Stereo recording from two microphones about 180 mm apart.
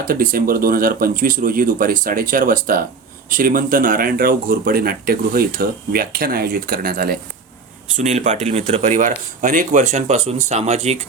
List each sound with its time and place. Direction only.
0.1 s speech: 50° right (ahead or behind)
7.9 s speech: 45° right (ahead or behind)